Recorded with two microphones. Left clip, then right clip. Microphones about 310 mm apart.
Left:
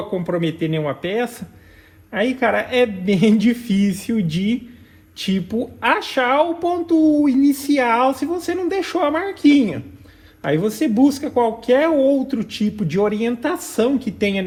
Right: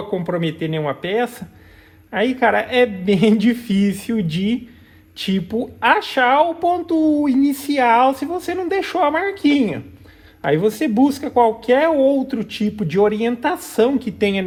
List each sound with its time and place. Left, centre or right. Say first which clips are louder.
0.1 s speech: right 1 dB; right